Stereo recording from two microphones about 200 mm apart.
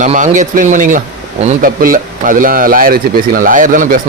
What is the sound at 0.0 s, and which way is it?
Speech, 40° right (ahead or behind).